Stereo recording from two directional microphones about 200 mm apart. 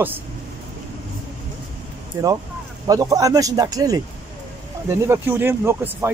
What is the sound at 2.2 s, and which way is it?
Speech, 15° right (ahead or behind).